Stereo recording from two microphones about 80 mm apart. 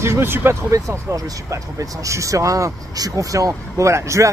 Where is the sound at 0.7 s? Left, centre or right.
Right.